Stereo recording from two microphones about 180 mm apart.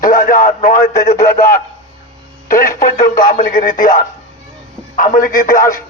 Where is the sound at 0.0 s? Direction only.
50° left (ahead or behind).